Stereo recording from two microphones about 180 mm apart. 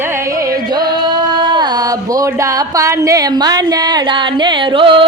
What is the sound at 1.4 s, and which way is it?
Music, 25° right (ahead or behind).